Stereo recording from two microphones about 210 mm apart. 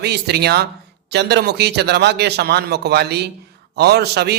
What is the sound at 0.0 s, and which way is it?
A man's voice, 50° right (ahead or behind).